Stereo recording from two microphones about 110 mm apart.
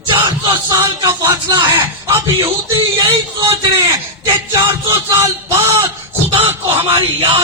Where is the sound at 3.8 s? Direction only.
25° right (ahead or behind).